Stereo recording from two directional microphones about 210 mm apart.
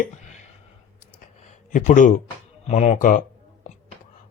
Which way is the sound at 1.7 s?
35° left (ahead or behind).